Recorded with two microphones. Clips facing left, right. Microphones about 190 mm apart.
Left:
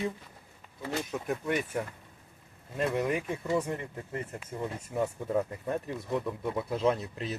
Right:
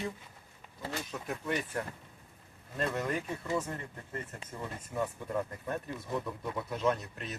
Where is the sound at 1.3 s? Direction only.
10° left (ahead or behind).